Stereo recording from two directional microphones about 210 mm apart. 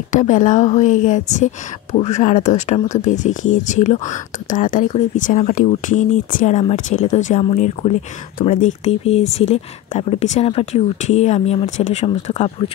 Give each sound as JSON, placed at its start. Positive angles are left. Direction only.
{"t": 0.1, "sound": "a woman's voice", "side_deg": 35}